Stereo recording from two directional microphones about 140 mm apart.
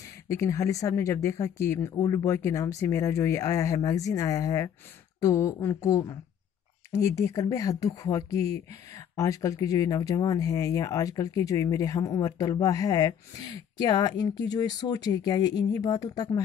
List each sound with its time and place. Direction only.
0.3 s speech: 20° left (ahead or behind)
7.2 s speech: 20° left (ahead or behind)